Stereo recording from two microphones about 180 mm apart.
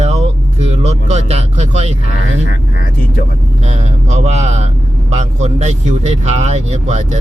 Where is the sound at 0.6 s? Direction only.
35° right (ahead or behind).